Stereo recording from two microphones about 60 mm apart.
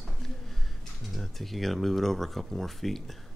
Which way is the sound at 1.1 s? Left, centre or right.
Centre.